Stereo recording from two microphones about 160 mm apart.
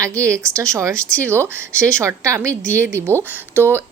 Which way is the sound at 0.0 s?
20° right (ahead or behind).